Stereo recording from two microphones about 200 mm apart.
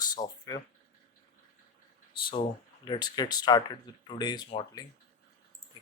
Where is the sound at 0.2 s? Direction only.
20° left (ahead or behind).